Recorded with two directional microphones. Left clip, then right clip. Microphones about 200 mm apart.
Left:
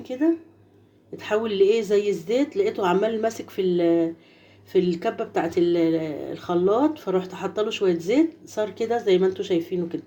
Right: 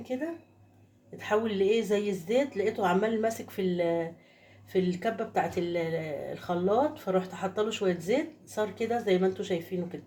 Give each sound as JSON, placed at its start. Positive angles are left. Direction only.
{"t": 1.1, "sound": "speech", "side_deg": 30}